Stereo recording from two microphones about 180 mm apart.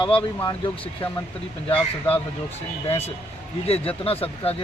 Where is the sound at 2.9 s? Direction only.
35° left (ahead or behind).